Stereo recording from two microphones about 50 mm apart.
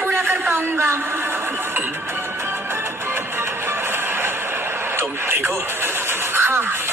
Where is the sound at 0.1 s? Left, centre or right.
Right.